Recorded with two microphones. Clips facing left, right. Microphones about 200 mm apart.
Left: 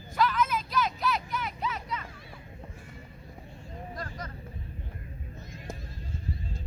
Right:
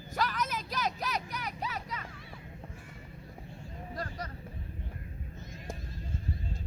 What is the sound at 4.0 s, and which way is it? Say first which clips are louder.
Vehicle: right 2 dB; 35° right (ahead or behind).